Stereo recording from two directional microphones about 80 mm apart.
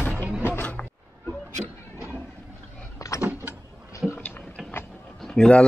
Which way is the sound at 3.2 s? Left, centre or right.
Right.